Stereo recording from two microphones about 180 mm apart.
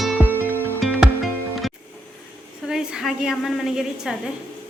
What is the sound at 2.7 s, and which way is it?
A woman's voice, 5° right (ahead or behind).